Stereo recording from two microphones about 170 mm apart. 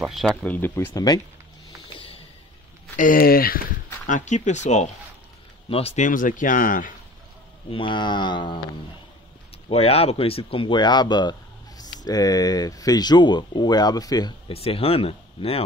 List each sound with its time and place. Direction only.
0.0 s speech: centre (ahead or behind); by 1.2 s 20° left (ahead or behind)
3.0 s speech: 55° left (ahead or behind)
4.1 s speech: 45° left (ahead or behind)
7.7 s speech: 30° left (ahead or behind)
9.7 s speech: 35° left (ahead or behind)
14.5 s speech: 35° left (ahead or behind)